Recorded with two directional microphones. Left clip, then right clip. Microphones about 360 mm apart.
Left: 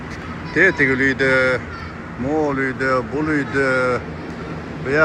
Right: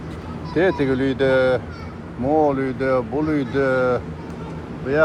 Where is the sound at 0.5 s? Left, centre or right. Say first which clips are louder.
Left 4 dB; right.